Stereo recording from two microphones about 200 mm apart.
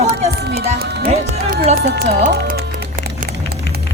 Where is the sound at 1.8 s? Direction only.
55° right (ahead or behind).